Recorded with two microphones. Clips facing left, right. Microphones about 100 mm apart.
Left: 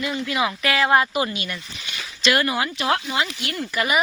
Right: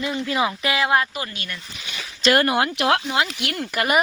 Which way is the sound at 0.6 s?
20° right (ahead or behind).